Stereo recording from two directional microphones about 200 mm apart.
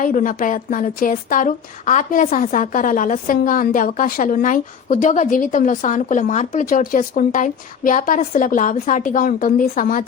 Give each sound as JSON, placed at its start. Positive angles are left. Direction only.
{"t": 0.0, "sound": "a woman's voice", "side_deg": 40}